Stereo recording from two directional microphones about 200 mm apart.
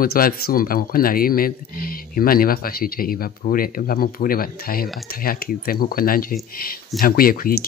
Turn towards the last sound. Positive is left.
turn(degrees=45)  # may be behind; listen again after turning